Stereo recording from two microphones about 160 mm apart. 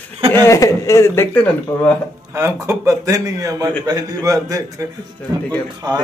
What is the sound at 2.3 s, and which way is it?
A man's voice, 20° right (ahead or behind).